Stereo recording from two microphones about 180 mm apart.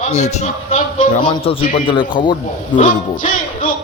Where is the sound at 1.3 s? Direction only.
30° left (ahead or behind).